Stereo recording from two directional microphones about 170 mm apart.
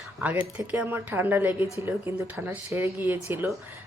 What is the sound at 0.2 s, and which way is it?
Speech, 10° right (ahead or behind).